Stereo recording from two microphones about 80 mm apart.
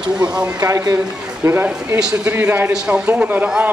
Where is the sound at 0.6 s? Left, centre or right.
Right.